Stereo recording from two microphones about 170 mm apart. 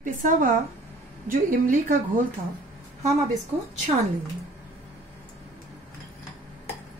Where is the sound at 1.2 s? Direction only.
50° right (ahead or behind).